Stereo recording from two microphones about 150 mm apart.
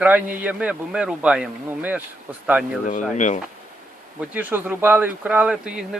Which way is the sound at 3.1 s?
55° left (ahead or behind).